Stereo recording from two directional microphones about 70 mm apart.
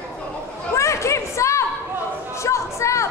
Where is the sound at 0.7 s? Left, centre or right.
Left.